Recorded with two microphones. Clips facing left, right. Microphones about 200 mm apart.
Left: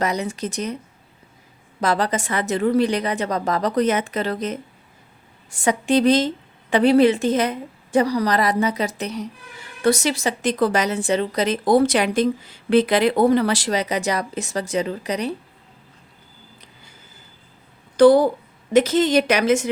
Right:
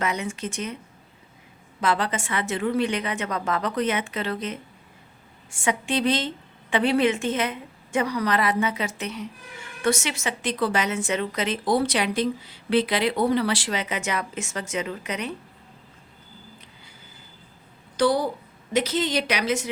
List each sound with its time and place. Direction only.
0.0 s a woman's voice: 35° left (ahead or behind)
1.8 s a woman's voice: 40° left (ahead or behind)
17.9 s a woman's voice: 50° left (ahead or behind)